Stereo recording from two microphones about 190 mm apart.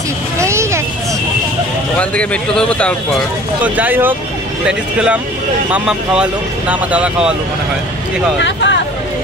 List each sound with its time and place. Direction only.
0.4 s vehicle: 15° right (ahead or behind)
2.0 s speech: 5° left (ahead or behind)
3.6 s speech: 10° right (ahead or behind)
8.4 s speech: 70° left (ahead or behind)